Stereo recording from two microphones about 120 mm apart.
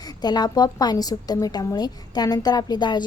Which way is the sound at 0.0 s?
35° left (ahead or behind).